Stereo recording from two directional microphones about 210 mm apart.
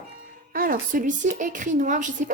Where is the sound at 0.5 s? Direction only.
45° right (ahead or behind).